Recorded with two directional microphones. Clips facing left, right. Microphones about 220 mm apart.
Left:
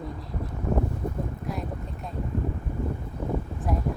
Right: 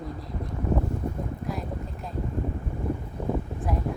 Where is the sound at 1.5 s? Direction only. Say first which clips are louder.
Even; centre (ahead or behind).